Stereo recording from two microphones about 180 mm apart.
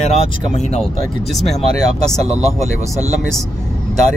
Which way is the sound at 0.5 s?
40° left (ahead or behind).